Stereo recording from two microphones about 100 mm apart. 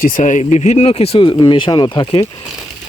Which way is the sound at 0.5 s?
90° left.